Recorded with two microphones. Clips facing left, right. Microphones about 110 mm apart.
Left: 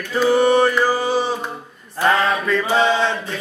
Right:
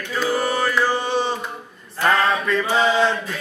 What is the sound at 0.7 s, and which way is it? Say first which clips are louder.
Mantra: left 2 dB; 10° left (ahead or behind).